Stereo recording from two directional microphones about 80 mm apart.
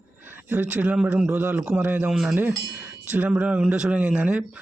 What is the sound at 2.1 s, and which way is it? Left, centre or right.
Speech, centre.